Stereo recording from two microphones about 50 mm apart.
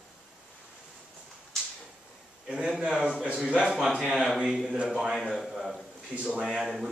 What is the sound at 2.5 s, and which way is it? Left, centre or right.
A man's voice, centre.